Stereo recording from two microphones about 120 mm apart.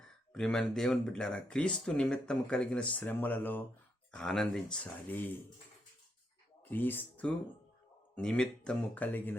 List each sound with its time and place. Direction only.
0.3 s speech: 5° left (ahead or behind)
4.1 s speech: 5° left (ahead or behind)
6.7 s speech: 15° left (ahead or behind)